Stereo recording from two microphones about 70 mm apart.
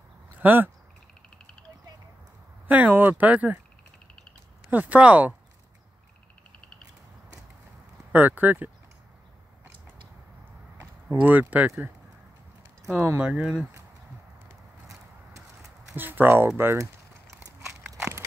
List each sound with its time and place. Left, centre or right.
0.4 s speech: right
2.7 s speech: right
4.6 s speech: right
8.1 s speech: right
10.8 s speech: right
13.2 s speech: centre
14.9 s a sound: right
15.9 s speech: right
16.7 s crumpling: right